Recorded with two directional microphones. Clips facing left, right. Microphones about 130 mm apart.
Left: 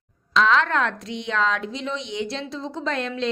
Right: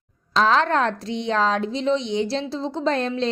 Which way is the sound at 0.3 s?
35° right (ahead or behind).